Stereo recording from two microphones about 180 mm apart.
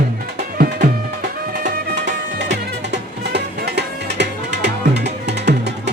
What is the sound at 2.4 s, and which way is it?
Music, 70° right (ahead or behind).